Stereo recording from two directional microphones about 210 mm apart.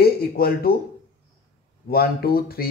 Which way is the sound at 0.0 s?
45° left (ahead or behind).